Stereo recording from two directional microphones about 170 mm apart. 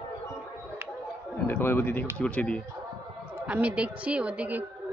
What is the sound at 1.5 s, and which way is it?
Speech, 10° left (ahead or behind).